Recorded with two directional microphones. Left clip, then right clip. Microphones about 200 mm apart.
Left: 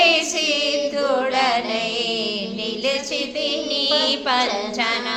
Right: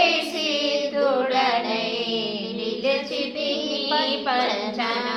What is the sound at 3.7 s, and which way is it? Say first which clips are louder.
Child singing: left 6 dB; 45° left (ahead or behind).